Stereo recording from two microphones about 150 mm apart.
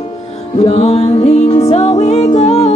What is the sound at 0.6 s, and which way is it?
Music, 45° left (ahead or behind).